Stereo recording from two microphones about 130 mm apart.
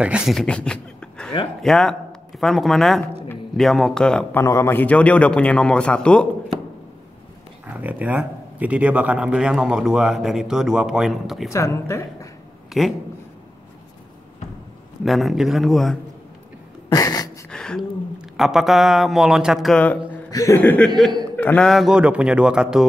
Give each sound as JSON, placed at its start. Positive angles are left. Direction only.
{"t": 0.0, "sound": "speech", "side_deg": -5}
{"t": 4.4, "sound": "a man's voice", "side_deg": 20}
{"t": 7.7, "sound": "speech", "side_deg": -10}
{"t": 11.5, "sound": "a woman's voice", "side_deg": 25}
{"t": 12.7, "sound": "speech", "side_deg": -5}
{"t": 15.0, "sound": "speech", "side_deg": 0}
{"t": 16.9, "sound": "a sound", "side_deg": 30}
{"t": 17.5, "sound": "speech", "side_deg": 5}
{"t": 20.2, "sound": "speech", "side_deg": 25}
{"t": 20.6, "sound": "a man's voice", "side_deg": 10}
{"t": 21.6, "sound": "speech", "side_deg": 0}